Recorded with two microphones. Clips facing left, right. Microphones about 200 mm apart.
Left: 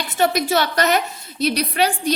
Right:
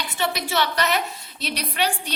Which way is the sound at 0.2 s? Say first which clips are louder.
Left 6 dB; 45° left (ahead or behind).